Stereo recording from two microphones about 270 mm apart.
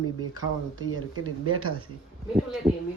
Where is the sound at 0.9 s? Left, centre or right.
Right.